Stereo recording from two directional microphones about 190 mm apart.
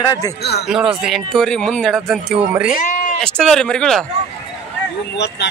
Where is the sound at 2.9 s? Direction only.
40° left (ahead or behind).